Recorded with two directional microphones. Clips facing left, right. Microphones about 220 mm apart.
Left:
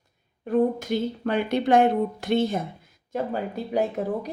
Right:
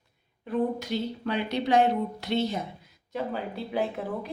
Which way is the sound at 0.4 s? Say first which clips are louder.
Left 5 dB; 50° left (ahead or behind).